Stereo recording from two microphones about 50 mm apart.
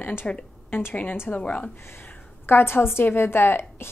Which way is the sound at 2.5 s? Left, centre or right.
Left.